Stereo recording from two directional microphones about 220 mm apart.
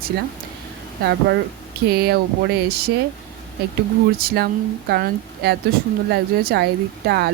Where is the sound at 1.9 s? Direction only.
45° right (ahead or behind).